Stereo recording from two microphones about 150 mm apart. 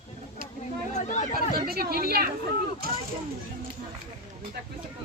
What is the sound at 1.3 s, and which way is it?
Speech, 90° right.